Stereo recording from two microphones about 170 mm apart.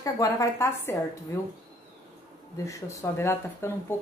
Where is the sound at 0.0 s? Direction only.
20° left (ahead or behind).